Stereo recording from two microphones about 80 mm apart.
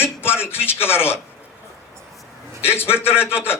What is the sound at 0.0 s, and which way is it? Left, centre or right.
A man's voice, left.